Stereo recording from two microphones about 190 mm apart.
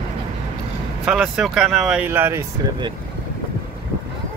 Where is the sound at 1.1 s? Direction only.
Centre (ahead or behind).